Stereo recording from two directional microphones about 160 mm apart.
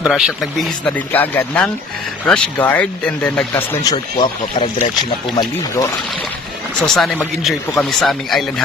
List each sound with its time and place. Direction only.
0.0 s speech: centre (ahead or behind)
3.8 s speech: 25° left (ahead or behind)
6.8 s speech: 5° left (ahead or behind)